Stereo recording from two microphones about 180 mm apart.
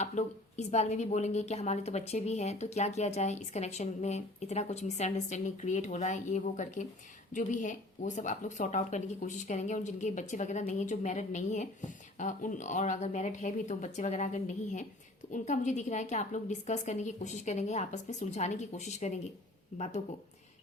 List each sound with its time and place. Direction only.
0.0 s speech: 40° left (ahead or behind)